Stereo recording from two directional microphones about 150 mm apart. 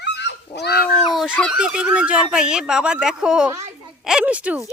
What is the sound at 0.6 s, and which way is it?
Cat, 90° left.